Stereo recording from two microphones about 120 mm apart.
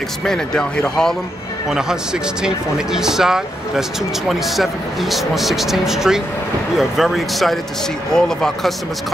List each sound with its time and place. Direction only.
0.2 s speech: 5° left (ahead or behind)
1.7 s speech: 5° right (ahead or behind)
5.1 s speech: centre (ahead or behind)